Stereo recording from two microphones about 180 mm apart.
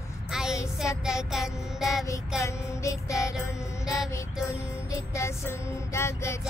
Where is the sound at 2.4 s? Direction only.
15° left (ahead or behind).